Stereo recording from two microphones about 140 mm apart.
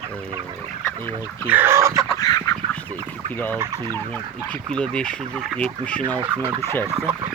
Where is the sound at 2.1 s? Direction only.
25° left (ahead or behind).